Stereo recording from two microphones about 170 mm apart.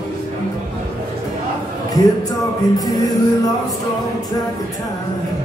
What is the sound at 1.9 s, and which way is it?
Music, 20° left (ahead or behind).